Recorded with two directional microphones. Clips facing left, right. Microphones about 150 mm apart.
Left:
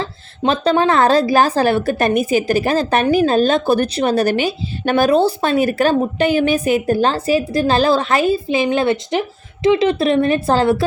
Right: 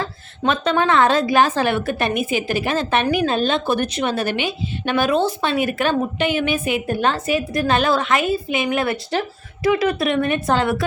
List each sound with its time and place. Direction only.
0.0 s a woman's voice: 30° left (ahead or behind)